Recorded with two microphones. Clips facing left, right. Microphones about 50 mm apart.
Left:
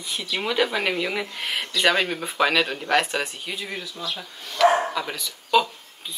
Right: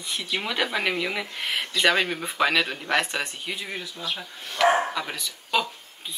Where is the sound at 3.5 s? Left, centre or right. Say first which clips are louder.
Left 1 dB; centre.